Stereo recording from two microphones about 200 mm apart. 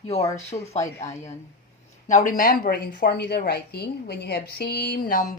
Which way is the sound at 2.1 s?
40° left (ahead or behind).